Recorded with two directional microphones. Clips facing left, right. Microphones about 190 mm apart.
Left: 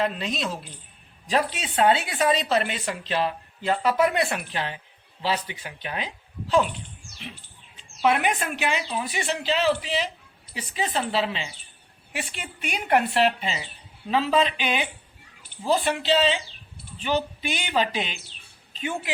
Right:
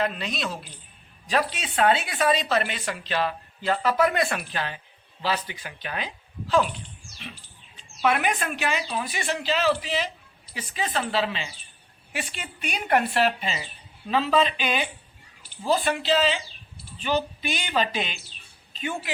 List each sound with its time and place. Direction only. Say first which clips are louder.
0.0 s a woman's voice: left 1 dB; 30° left (ahead or behind)
8.0 s a woman's voice: left 1 dB; 20° left (ahead or behind)